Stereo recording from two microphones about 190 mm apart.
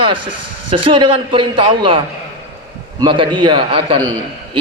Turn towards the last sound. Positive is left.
turn(degrees=-30)  # may be behind; listen again after turning